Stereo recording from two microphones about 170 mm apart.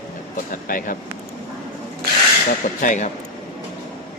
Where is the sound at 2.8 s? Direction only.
45° left (ahead or behind).